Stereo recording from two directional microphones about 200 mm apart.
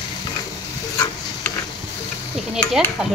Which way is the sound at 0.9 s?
15° left (ahead or behind).